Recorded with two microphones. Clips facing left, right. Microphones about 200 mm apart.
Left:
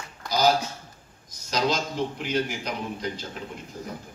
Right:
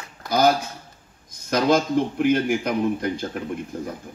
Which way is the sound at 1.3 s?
55° right (ahead or behind).